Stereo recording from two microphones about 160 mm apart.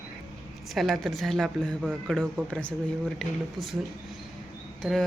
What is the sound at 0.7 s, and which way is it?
Speech, centre (ahead or behind).